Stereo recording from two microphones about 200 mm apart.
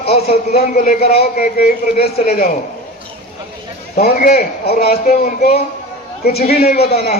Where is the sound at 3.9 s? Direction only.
50° left (ahead or behind).